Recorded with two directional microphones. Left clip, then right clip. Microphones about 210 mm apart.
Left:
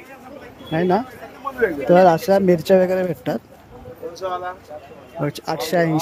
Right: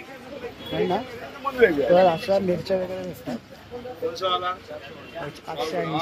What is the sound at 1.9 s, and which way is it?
Speech, 40° left (ahead or behind).